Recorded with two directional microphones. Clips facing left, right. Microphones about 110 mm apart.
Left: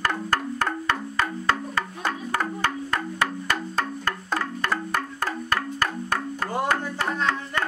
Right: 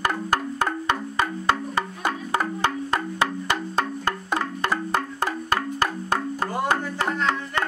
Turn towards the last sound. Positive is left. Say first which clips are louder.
# right 1 dB
turn(degrees=-25)  # may be behind; listen again after turning